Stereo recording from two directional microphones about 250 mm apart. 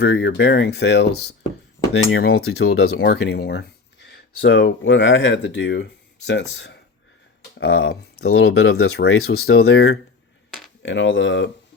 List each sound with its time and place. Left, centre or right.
0.0 s speech: left
1.9 s cutlery: left
2.7 s speech: left
3.1 s speech: left
10.8 s cutlery: left